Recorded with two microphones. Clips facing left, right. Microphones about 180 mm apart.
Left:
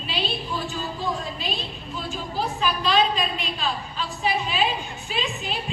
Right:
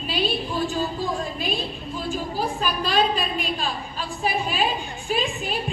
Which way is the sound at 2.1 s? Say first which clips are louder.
Right 1 dB; 45° right (ahead or behind).